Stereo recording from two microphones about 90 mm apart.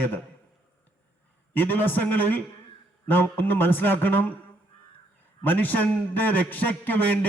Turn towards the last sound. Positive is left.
turn(degrees=20)  # may be behind; listen again after turning